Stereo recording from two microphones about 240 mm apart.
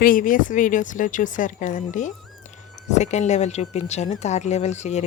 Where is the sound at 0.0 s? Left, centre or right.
Left.